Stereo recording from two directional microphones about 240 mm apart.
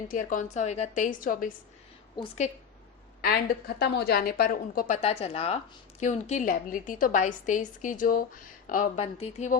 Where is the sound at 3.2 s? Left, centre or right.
Left.